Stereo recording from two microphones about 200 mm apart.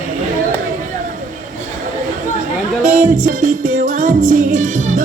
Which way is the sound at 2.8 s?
40° right (ahead or behind).